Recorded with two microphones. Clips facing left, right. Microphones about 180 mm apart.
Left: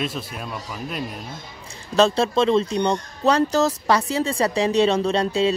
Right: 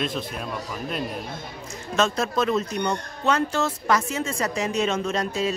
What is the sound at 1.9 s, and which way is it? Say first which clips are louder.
Speech: left 5 dB; 30° left (ahead or behind).